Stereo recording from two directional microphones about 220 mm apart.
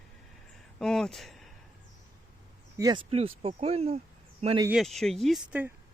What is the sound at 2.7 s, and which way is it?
Speech, 20° right (ahead or behind).